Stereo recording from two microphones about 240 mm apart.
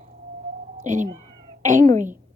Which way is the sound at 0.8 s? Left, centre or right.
Right.